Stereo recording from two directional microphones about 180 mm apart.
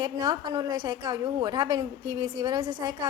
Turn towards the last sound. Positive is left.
turn(degrees=-20)  # may be behind; listen again after turning